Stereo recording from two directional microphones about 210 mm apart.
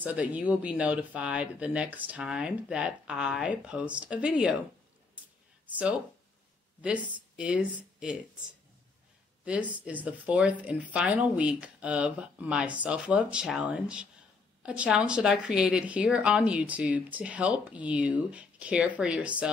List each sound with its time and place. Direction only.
0.0 s a woman's voice: 5° right (ahead or behind)
5.7 s speech: 5° right (ahead or behind)
9.4 s a woman's voice: 5° right (ahead or behind)